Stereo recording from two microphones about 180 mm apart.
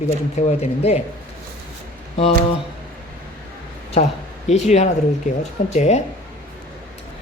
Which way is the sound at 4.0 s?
40° left (ahead or behind).